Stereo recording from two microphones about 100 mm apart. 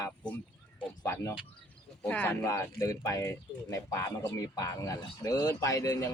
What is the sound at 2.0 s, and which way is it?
Speech, 15° left (ahead or behind).